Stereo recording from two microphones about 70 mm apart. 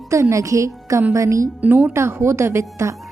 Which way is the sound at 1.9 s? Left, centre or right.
Right.